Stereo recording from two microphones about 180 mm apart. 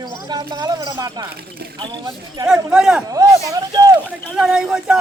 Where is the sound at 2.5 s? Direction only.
5° right (ahead or behind).